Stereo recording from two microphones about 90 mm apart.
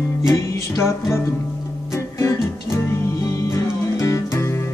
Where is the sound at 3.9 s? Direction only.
35° left (ahead or behind).